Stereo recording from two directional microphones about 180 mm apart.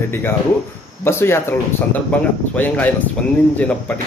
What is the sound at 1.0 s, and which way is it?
A man's voice, 15° left (ahead or behind).